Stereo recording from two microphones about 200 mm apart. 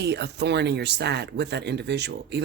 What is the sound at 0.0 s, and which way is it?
Speech, 55° right (ahead or behind).